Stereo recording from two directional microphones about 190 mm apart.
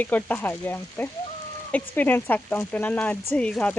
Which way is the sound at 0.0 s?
10° left (ahead or behind).